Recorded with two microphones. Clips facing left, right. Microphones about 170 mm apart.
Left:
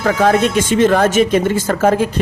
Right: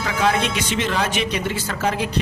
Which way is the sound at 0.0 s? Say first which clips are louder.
Left 7 dB; 50° left (ahead or behind).